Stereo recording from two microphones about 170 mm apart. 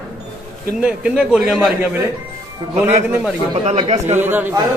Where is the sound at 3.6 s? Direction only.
35° right (ahead or behind).